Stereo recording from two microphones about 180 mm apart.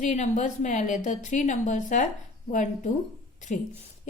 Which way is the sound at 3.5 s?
45° left (ahead or behind).